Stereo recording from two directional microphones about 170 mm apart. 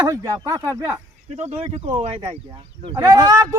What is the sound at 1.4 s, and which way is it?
Speech, 40° right (ahead or behind).